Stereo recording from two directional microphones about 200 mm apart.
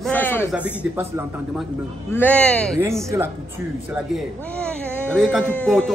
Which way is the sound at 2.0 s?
10° left (ahead or behind).